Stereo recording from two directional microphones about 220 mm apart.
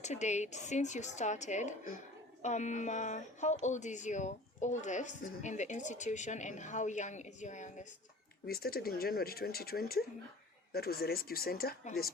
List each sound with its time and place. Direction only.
0.0 s a woman's voice: 30° left (ahead or behind)
8.4 s speech: 45° left (ahead or behind)